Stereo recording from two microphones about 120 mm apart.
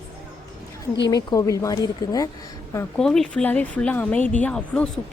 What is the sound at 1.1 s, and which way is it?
Speech, 30° left (ahead or behind).